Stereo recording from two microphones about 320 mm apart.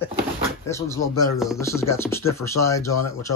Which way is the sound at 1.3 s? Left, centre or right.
Centre.